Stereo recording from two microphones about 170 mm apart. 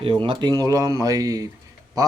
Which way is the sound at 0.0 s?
30° right (ahead or behind).